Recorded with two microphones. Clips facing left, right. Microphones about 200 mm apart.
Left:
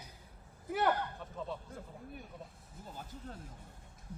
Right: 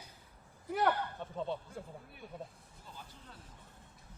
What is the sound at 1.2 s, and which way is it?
Speech, 30° right (ahead or behind).